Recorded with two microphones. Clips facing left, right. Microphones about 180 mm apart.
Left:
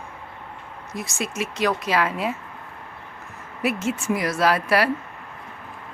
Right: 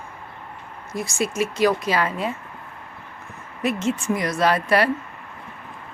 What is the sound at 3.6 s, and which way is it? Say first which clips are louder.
Speech: right 1 dB; 5° left (ahead or behind).